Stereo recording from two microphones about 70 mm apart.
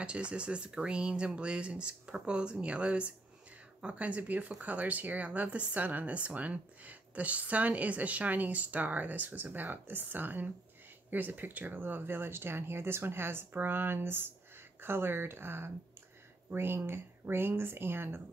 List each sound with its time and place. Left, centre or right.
0.0 s speech: centre; by 18.2 s right